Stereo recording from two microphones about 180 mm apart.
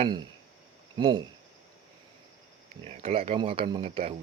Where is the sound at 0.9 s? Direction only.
25° right (ahead or behind).